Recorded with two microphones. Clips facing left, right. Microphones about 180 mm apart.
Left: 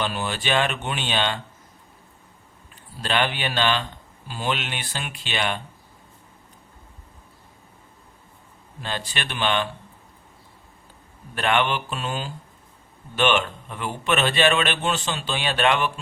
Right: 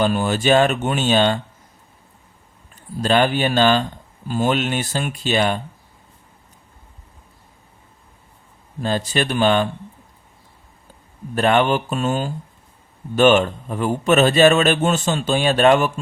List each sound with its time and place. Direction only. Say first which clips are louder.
0.0 s speech: right 9 dB; 45° right (ahead or behind)
3.0 s speech: right 7 dB; 40° right (ahead or behind)
8.8 s a man's voice: right 10 dB; 40° right (ahead or behind)
11.3 s a man's voice: right 6 dB; 40° right (ahead or behind)